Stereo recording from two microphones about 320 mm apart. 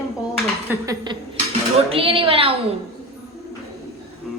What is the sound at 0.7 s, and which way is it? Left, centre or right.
A woman's voice, centre.